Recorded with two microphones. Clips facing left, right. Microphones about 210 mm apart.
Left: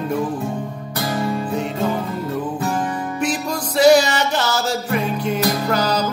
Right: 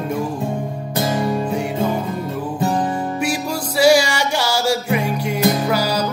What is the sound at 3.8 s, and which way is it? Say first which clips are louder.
Music: left 1 dB; 10° right (ahead or behind).